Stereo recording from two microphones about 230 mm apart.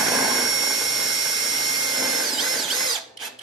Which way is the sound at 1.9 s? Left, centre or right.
Centre.